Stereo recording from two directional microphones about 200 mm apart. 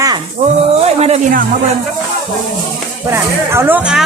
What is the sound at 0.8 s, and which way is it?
Speech, 30° right (ahead or behind).